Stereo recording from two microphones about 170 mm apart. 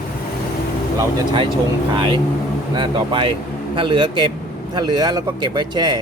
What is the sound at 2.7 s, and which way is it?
A man's voice, 30° right (ahead or behind).